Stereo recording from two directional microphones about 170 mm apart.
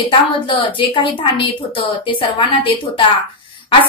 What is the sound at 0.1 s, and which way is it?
A woman's voice, 30° left (ahead or behind).